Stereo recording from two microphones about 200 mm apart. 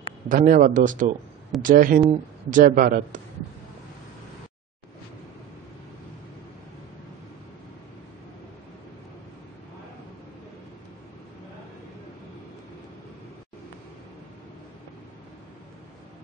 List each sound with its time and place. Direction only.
0.3 s a man's voice: 40° right (ahead or behind)